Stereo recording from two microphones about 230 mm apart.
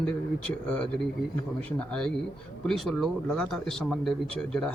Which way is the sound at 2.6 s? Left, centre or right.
Centre.